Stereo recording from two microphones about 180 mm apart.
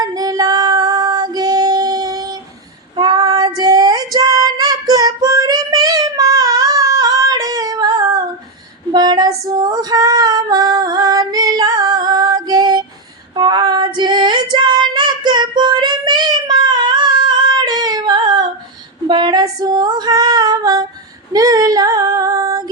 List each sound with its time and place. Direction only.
0.0 s female singing: 20° right (ahead or behind)
21.3 s child singing: 20° right (ahead or behind)